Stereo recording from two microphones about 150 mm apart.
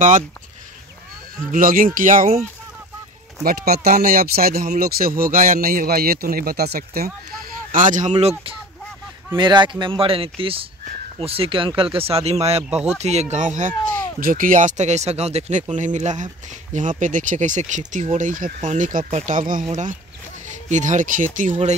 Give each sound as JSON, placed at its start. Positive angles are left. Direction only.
{"t": 1.5, "sound": "speech", "side_deg": -65}
{"t": 3.4, "sound": "speech", "side_deg": -90}
{"t": 7.7, "sound": "speech", "side_deg": -60}
{"t": 9.4, "sound": "speech", "side_deg": -30}